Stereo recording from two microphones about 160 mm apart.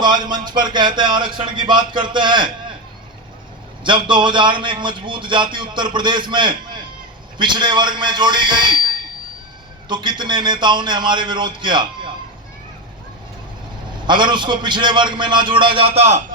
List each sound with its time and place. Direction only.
0.0 s speech: 30° right (ahead or behind)
3.8 s a man's voice: 30° right (ahead or behind)
9.9 s speech: 30° right (ahead or behind)
14.1 s speech: 30° right (ahead or behind)